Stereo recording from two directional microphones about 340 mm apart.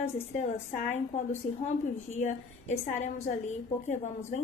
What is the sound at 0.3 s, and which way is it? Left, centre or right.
A woman's voice, left.